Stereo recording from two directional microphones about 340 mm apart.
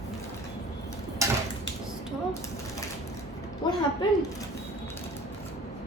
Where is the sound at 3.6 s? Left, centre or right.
Centre.